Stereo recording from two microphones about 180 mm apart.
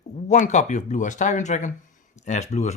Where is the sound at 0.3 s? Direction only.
40° left (ahead or behind).